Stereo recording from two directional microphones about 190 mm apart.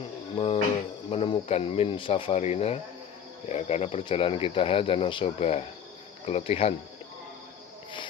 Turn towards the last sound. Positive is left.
turn(degrees=30)  # may be behind; listen again after turning